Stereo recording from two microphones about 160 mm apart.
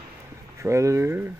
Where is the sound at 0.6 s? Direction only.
20° right (ahead or behind).